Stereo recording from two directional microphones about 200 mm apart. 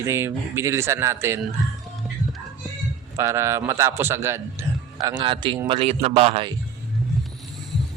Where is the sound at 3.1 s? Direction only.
15° right (ahead or behind).